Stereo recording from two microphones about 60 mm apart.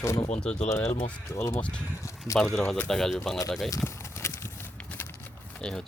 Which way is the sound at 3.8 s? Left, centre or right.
Left.